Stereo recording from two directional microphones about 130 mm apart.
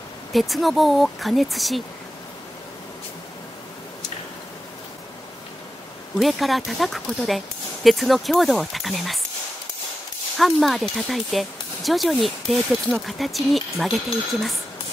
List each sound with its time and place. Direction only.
0.3 s speech: centre (ahead or behind)
6.1 s speech: centre (ahead or behind)
10.3 s speech: centre (ahead or behind)